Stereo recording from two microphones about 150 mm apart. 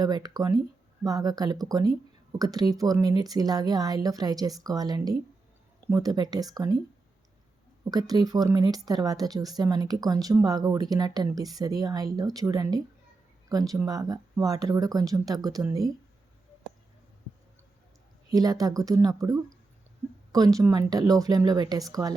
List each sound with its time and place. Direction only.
0.0 s speech: 25° right (ahead or behind)
7.9 s speech: 25° right (ahead or behind)
18.3 s speech: 25° right (ahead or behind)